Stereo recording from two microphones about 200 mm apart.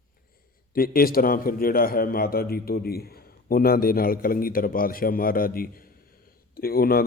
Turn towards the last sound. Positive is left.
turn(degrees=50)  # may be behind; listen again after turning